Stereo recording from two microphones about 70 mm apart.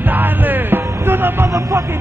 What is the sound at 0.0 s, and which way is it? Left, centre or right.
Music, right.